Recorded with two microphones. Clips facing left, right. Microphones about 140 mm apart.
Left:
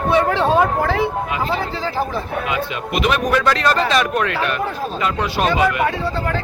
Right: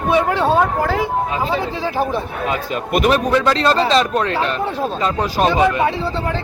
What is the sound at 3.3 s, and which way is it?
Speech, 25° right (ahead or behind).